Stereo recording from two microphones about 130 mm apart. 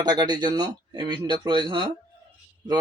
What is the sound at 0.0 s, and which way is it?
Speech, 30° right (ahead or behind).